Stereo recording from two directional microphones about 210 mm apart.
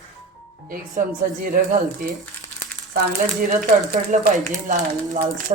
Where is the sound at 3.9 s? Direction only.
35° right (ahead or behind).